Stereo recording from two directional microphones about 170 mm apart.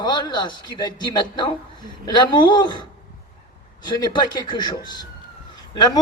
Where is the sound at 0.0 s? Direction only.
25° left (ahead or behind).